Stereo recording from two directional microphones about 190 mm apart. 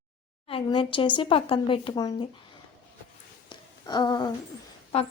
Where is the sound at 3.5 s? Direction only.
20° left (ahead or behind).